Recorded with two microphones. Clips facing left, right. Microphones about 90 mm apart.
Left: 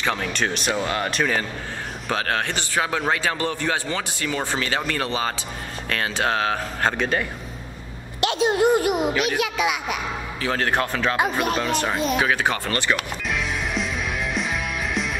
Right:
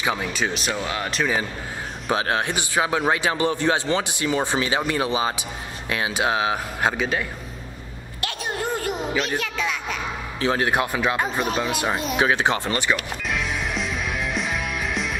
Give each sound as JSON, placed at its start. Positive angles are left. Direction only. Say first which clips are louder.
{"t": 0.0, "sound": "speech", "louder": "even", "side_deg": -10}
{"t": 2.0, "sound": "speech", "louder": "right 2 dB", "side_deg": -15}
{"t": 8.2, "sound": "a sound", "louder": "left 9 dB", "side_deg": 20}
{"t": 9.4, "sound": "a child's voice", "louder": "left 4 dB", "side_deg": 15}
{"t": 10.4, "sound": "speech", "louder": "right 2 dB", "side_deg": -15}
{"t": 11.3, "sound": "speech", "louder": "left 1 dB", "side_deg": 0}
{"t": 12.2, "sound": "speech", "louder": "right 1 dB", "side_deg": -20}
{"t": 13.3, "sound": "music", "louder": "even", "side_deg": 0}